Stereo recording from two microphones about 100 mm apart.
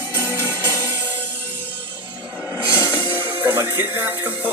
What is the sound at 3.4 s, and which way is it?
Speech, 20° right (ahead or behind).